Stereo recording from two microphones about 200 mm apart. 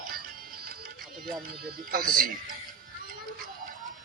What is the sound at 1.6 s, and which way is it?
Speech, 45° right (ahead or behind).